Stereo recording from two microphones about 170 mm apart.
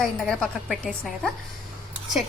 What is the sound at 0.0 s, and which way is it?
A woman's voice, 5° left (ahead or behind).